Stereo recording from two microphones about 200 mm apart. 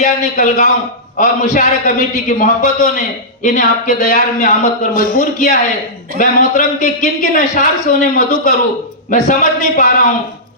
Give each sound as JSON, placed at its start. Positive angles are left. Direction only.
{"t": 0.0, "sound": "speech", "side_deg": 40}